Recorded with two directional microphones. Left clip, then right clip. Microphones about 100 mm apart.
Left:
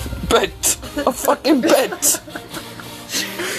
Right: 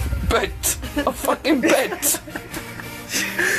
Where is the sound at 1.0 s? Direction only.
45° left (ahead or behind).